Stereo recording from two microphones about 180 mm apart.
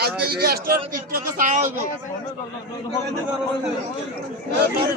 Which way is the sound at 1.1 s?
45° right (ahead or behind).